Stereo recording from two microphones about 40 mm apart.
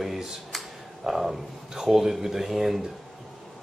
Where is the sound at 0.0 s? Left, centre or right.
Centre.